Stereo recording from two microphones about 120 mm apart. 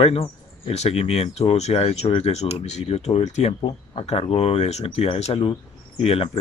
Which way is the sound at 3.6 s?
55° left (ahead or behind).